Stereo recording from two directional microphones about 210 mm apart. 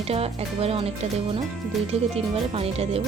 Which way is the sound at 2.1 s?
30° right (ahead or behind).